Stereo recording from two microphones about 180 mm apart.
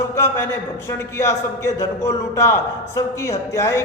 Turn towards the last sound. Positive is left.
turn(degrees=15)  # may be behind; listen again after turning